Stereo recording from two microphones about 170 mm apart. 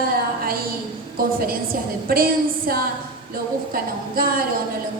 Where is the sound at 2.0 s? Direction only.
60° right (ahead or behind).